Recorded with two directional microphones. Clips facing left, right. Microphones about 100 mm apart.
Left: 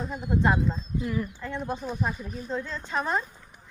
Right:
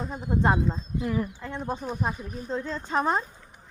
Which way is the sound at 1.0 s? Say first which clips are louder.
Right 3 dB; 30° right (ahead or behind).